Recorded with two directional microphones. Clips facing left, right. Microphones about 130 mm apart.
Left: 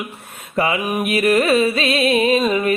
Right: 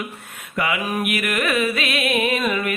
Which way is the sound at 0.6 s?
30° left (ahead or behind).